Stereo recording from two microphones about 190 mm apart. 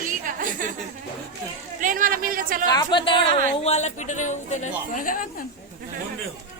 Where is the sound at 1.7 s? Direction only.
45° right (ahead or behind).